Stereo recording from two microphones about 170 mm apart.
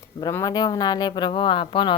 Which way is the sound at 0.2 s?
20° left (ahead or behind).